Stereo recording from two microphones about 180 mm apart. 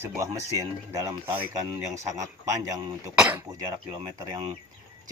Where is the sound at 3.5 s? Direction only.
20° right (ahead or behind).